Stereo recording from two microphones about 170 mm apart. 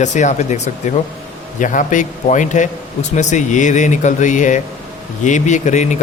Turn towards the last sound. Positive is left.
turn(degrees=45)  # may be behind; listen again after turning